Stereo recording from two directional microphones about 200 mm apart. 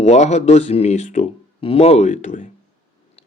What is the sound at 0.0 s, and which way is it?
Speech, 35° left (ahead or behind).